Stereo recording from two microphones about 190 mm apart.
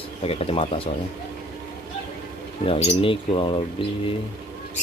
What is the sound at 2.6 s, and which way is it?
Speech, 30° left (ahead or behind).